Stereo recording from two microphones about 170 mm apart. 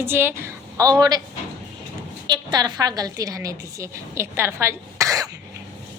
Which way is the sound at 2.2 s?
25° right (ahead or behind).